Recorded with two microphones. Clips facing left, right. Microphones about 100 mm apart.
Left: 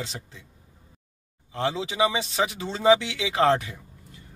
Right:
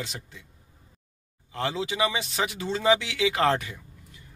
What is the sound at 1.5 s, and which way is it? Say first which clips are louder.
Speech: left 1 dB; 25° left (ahead or behind).